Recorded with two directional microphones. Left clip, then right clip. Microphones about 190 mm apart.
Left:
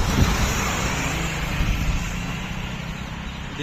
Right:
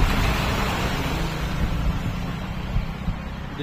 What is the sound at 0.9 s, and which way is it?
Vehicle, 70° right (ahead or behind).